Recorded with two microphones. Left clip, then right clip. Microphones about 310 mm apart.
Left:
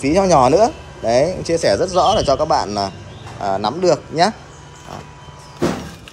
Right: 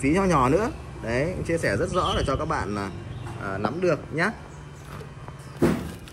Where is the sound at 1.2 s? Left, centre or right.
Left.